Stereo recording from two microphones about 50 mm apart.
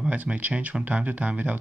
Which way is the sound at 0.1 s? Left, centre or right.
Right.